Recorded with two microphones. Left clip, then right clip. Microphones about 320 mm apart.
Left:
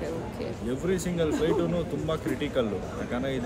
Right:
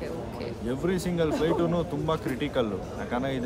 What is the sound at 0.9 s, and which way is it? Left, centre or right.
Speech, centre.